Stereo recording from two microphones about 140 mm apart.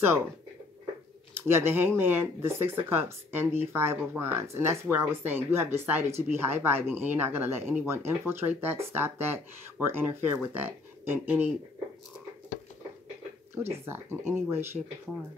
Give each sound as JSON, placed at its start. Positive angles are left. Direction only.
{"t": 1.3, "sound": "speech", "side_deg": -15}
{"t": 13.6, "sound": "speech", "side_deg": -15}